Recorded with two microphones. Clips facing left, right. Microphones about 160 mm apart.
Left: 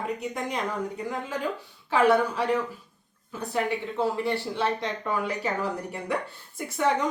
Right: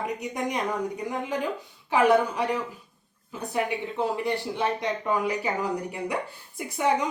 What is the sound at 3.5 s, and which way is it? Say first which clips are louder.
A woman's voice: even; 15° right (ahead or behind).